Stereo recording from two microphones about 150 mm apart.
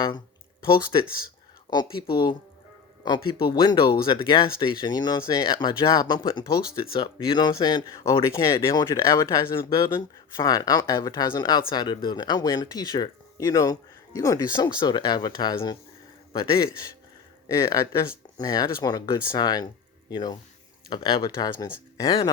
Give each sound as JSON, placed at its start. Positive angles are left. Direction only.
{"t": 0.6, "sound": "a man's voice", "side_deg": 35}
{"t": 18.3, "sound": "speech", "side_deg": 25}